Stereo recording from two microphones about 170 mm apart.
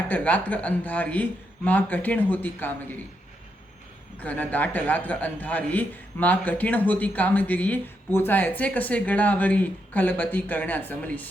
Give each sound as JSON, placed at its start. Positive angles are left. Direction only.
{"t": 0.1, "sound": "a man's voice", "side_deg": 10}
{"t": 4.2, "sound": "a man's voice", "side_deg": 10}